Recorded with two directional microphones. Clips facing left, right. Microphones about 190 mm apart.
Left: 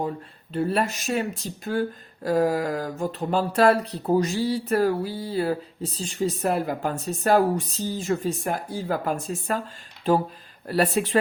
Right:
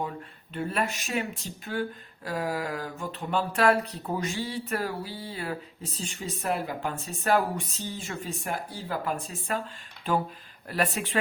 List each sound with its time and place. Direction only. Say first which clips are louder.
0.5 s speech: left 6 dB; 35° left (ahead or behind)
10.7 s speech: left 7 dB; 35° left (ahead or behind)